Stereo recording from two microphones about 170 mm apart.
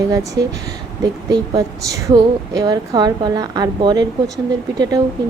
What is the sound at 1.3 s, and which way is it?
A woman's voice, 20° right (ahead or behind).